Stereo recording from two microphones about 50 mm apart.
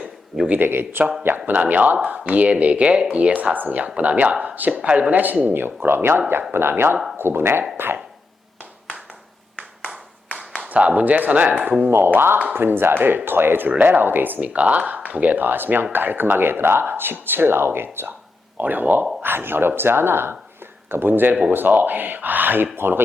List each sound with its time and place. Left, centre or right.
0.6 s speech: right
1.6 s speech: right
10.3 s clapping: left
10.7 s speech: right
11.9 s speech: right
13.7 s speech: right
18.5 s speech: right